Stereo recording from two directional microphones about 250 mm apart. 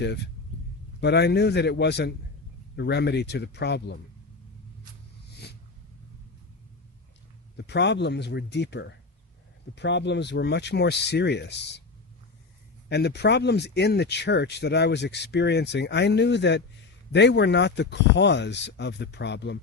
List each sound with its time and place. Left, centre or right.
1.0 s a man's voice: left
7.5 s speech: left
12.9 s speech: left